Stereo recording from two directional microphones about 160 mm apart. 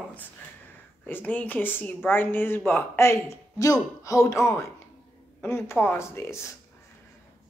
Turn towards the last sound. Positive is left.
turn(degrees=15)  # may be behind; listen again after turning